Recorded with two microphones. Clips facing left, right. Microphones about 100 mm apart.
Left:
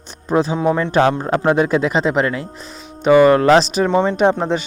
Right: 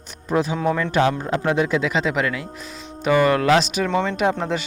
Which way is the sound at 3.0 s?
25° left (ahead or behind).